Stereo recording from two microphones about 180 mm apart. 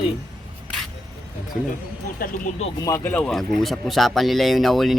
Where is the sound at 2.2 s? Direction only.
45° left (ahead or behind).